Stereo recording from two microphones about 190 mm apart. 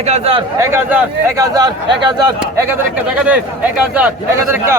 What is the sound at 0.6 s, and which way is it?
A man's voice, 10° right (ahead or behind).